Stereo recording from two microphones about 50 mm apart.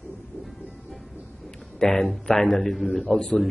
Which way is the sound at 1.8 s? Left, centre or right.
Centre.